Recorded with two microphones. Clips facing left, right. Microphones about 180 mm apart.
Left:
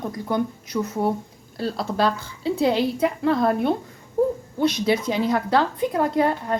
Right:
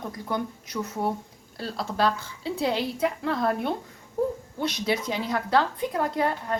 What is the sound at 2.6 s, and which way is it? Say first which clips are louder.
Speech: left 5 dB; 20° left (ahead or behind).